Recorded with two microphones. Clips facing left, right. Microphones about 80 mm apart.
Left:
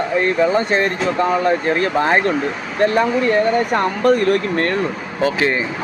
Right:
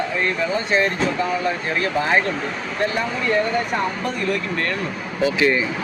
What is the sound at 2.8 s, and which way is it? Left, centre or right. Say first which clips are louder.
Speech: left 8 dB; left.